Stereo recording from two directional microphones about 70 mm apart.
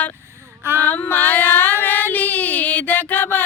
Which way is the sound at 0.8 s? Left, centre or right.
Left.